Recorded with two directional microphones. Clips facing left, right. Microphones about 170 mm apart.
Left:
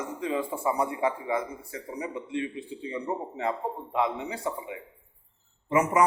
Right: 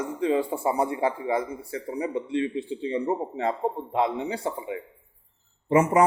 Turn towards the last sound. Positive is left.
turn(degrees=-30)  # may be behind; listen again after turning